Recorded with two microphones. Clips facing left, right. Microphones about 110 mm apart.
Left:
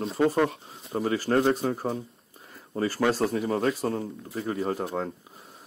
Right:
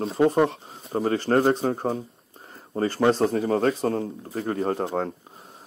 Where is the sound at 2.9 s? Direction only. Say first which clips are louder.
Right 5 dB; 30° right (ahead or behind).